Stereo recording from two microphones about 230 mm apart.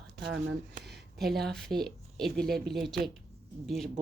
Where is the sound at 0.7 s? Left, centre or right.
Right.